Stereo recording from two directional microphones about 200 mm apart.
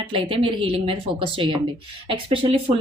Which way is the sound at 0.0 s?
25° right (ahead or behind).